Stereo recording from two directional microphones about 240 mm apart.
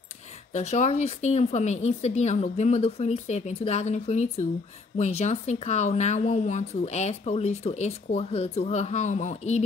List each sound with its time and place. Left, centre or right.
0.5 s speech: left